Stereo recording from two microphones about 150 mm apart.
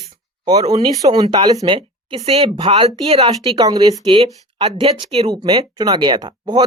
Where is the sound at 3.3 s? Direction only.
25° right (ahead or behind).